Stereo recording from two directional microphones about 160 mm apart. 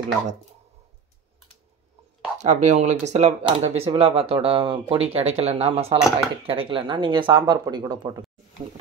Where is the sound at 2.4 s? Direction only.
45° right (ahead or behind).